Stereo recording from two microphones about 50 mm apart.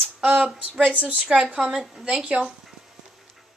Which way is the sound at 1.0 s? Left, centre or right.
Right.